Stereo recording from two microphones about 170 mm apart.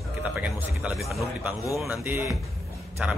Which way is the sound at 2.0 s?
15° right (ahead or behind).